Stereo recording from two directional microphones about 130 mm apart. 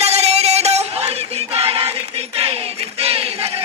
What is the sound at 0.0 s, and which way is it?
Music, 55° right (ahead or behind).